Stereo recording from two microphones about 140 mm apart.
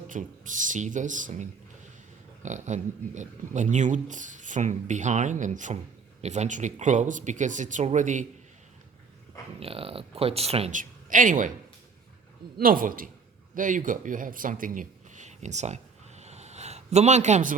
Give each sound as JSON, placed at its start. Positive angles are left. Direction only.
{"t": 0.1, "sound": "speech", "side_deg": -65}
{"t": 9.6, "sound": "speech", "side_deg": -45}
{"t": 10.7, "sound": "speech", "side_deg": -70}
{"t": 12.5, "sound": "a man's voice", "side_deg": -90}
{"t": 13.6, "sound": "speech", "side_deg": -70}